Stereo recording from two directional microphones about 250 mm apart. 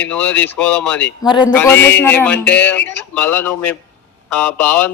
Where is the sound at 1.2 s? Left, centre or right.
Centre.